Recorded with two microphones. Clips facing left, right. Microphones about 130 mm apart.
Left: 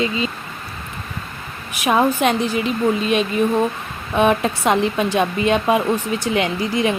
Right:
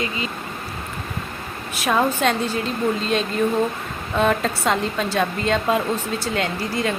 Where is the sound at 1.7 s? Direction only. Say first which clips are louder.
Left 3 dB; 15° left (ahead or behind).